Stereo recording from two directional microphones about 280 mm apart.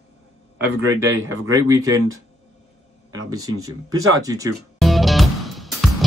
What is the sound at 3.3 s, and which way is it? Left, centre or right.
A man's voice, centre.